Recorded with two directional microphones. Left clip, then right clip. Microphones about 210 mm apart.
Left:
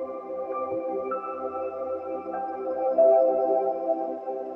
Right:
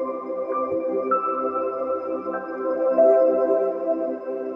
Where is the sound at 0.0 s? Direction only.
45° right (ahead or behind).